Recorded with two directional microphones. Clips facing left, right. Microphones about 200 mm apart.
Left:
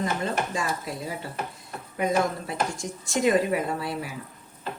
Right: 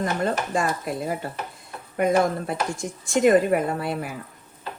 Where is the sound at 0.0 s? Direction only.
55° right (ahead or behind).